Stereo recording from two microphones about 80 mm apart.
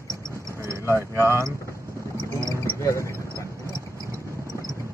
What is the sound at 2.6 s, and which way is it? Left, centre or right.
Basketball bounce, left.